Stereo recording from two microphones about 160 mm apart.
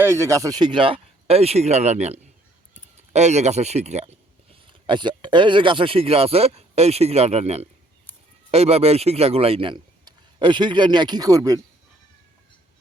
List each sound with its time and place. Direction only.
0.0 s speech: 15° right (ahead or behind); by 4.2 s 45° right (ahead or behind)
4.6 s speech: 30° right (ahead or behind)